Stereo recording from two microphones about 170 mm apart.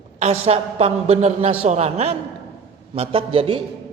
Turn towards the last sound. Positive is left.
turn(degrees=-30)  # may be behind; listen again after turning